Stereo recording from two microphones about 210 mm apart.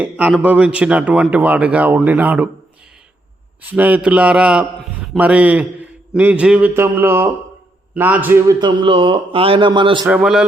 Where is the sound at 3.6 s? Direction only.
10° right (ahead or behind).